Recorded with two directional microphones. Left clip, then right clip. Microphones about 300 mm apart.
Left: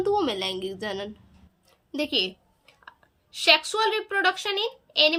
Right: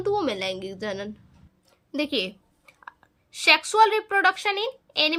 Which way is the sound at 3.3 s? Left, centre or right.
Centre.